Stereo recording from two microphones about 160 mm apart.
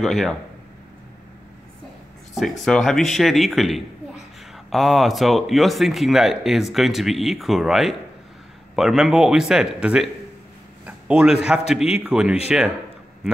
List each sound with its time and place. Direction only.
0.0 s speech: centre (ahead or behind)
2.6 s a man's voice: centre (ahead or behind)